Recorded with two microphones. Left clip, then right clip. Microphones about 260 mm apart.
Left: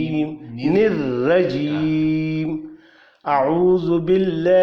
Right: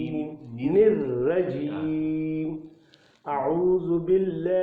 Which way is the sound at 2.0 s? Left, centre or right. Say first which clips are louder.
Left 7 dB; left.